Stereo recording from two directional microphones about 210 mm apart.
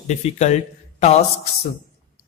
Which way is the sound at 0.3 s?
30° left (ahead or behind).